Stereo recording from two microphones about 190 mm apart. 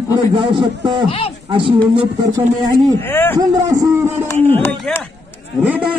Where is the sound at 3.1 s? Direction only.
10° left (ahead or behind).